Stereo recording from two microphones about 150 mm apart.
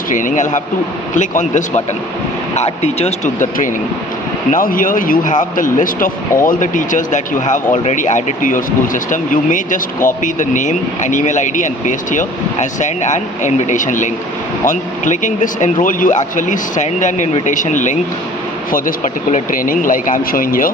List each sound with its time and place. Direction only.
0.1 s speech: 60° left (ahead or behind)
2.6 s speech: 45° left (ahead or behind)
4.5 s speech: 65° left (ahead or behind)